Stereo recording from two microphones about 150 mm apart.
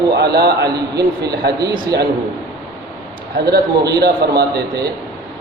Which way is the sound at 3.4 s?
90° right.